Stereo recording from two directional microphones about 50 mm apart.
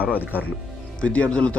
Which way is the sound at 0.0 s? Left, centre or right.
Right.